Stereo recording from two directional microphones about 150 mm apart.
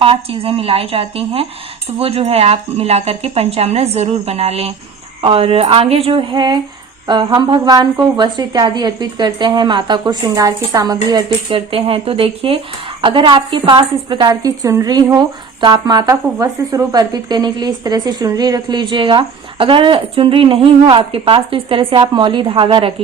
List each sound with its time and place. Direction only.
0.0 s a woman's voice: 40° right (ahead or behind)